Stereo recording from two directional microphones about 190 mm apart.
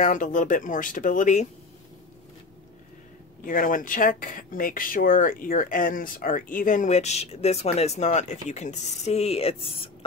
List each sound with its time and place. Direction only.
0.0 s speech: 45° left (ahead or behind)
3.4 s speech: 45° left (ahead or behind); by 9.8 s 30° left (ahead or behind)